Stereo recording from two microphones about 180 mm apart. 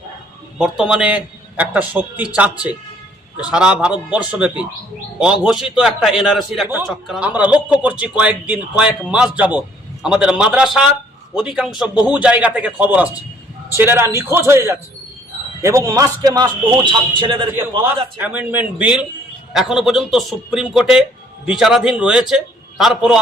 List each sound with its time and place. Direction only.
0.6 s a man's voice: 5° right (ahead or behind); by 17.5 s 30° right (ahead or behind)
18.2 s a man's voice: 10° right (ahead or behind)